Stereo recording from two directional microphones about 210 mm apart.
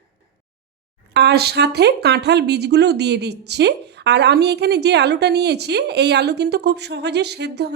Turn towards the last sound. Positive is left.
turn(degrees=-55)  # may be behind; listen again after turning